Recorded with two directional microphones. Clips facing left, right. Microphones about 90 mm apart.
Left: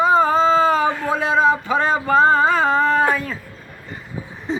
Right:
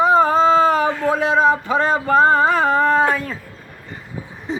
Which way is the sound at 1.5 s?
45° right (ahead or behind).